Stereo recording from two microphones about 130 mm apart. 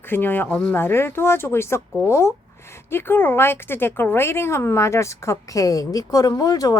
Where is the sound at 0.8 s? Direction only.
20° left (ahead or behind).